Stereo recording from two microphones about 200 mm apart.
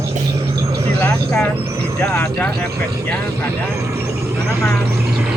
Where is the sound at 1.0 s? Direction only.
5° left (ahead or behind).